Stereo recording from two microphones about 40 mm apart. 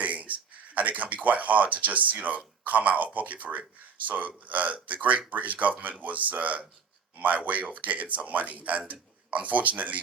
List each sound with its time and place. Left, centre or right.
0.0 s a man's voice: right